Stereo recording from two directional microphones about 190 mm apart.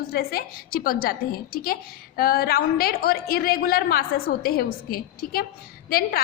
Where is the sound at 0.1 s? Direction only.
55° left (ahead or behind).